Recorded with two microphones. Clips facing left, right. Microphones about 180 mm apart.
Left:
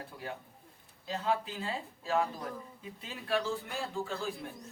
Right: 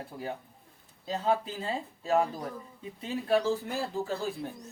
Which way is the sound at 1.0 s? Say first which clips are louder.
Right 4 dB; 30° right (ahead or behind).